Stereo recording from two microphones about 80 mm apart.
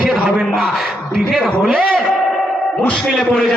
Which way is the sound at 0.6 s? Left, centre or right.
Centre.